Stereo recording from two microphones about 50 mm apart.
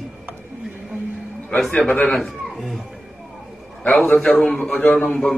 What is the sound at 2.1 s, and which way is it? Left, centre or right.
Speech, centre.